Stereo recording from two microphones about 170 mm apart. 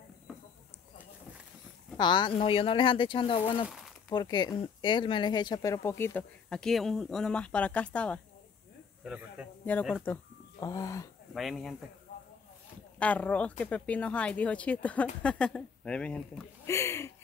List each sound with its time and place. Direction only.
2.0 s speech: 25° left (ahead or behind)
3.6 s a sound: centre (ahead or behind)
4.1 s speech: 25° left (ahead or behind); by 8.2 s 5° left (ahead or behind)
9.0 s speech: 5° right (ahead or behind)
10.1 s speech: 10° left (ahead or behind)
11.3 s speech: centre (ahead or behind)
13.0 s speech: 10° left (ahead or behind)